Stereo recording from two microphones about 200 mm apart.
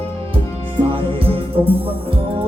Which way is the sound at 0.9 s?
25° right (ahead or behind).